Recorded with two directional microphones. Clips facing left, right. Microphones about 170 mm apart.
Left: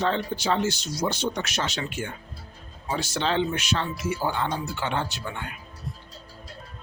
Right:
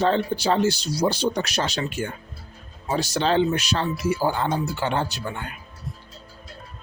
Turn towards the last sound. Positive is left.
turn(degrees=-40)  # may be behind; listen again after turning